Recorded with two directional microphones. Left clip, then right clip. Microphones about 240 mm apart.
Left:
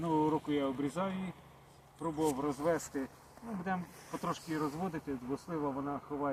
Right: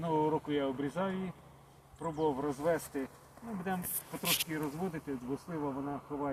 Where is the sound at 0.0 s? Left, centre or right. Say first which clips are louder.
Even; right.